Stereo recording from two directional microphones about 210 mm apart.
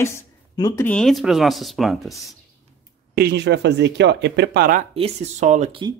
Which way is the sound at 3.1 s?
55° right (ahead or behind).